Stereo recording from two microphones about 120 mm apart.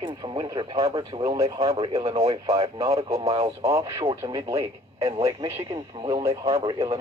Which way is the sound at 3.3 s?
60° right (ahead or behind).